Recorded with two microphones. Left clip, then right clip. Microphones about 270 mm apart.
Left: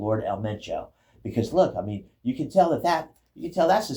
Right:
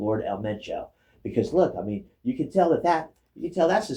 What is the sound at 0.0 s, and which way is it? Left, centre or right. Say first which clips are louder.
Speech: even; left.